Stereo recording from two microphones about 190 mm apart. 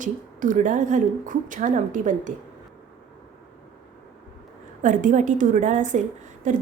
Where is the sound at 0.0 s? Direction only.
45° right (ahead or behind).